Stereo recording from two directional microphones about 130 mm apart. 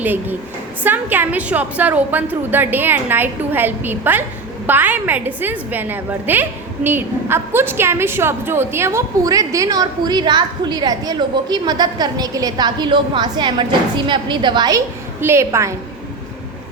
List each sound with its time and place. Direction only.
0.0 s a woman's voice: 15° right (ahead or behind); by 14.8 s 35° right (ahead or behind)
15.2 s a woman's voice: 20° right (ahead or behind)